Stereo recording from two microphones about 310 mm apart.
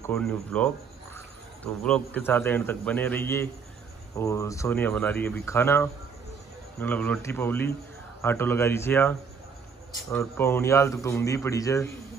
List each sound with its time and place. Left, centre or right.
0.0 s a man's voice: centre
10.1 s a man's voice: centre